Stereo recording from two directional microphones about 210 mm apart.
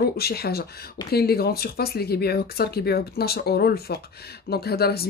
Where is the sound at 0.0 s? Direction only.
50° left (ahead or behind).